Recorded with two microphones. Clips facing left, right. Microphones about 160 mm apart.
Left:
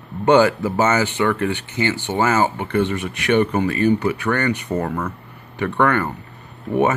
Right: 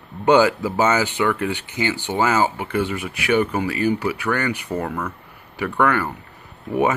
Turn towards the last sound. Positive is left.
turn(degrees=-10)  # may be behind; listen again after turning